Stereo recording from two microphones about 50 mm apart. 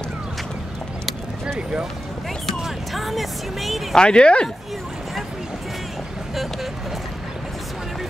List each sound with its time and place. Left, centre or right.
2.6 s speech: centre
3.9 s speech: centre